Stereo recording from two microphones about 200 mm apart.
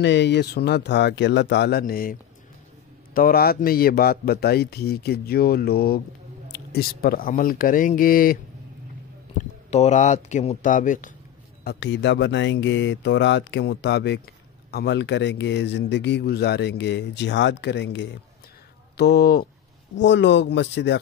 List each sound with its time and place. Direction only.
0.0 s speech: 60° left (ahead or behind)
3.2 s a man's voice: 50° left (ahead or behind)
9.4 s speech: 35° left (ahead or behind)
11.6 s speech: 55° left (ahead or behind)
18.9 s a man's voice: 50° left (ahead or behind)
20.0 s speech: 65° left (ahead or behind)